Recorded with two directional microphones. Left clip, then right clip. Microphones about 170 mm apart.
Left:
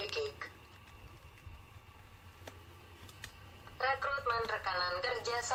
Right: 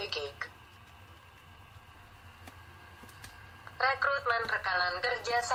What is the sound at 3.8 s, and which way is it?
Speech, 30° right (ahead or behind).